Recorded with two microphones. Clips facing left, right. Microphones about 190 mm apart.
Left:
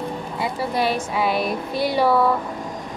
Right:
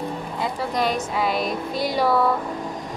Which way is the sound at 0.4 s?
5° left (ahead or behind).